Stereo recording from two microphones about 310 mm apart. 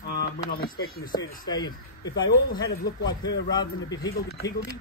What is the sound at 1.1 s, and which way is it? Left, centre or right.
Speech, centre.